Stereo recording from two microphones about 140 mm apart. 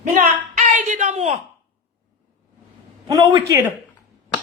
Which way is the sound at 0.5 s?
60° right (ahead or behind).